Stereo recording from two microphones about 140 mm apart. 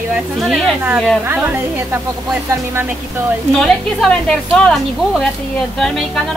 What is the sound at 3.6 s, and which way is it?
A woman's voice, 5° left (ahead or behind).